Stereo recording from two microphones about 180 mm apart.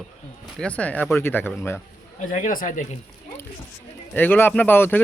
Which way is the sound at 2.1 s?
45° left (ahead or behind).